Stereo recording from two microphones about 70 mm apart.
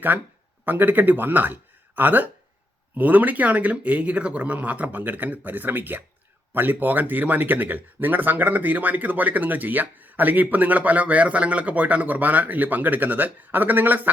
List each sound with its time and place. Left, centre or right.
0.6 s speech: right